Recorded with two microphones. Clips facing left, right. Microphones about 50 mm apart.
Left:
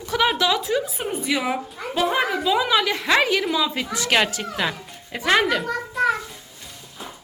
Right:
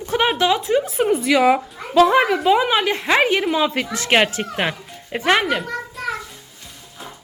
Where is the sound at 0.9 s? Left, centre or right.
Right.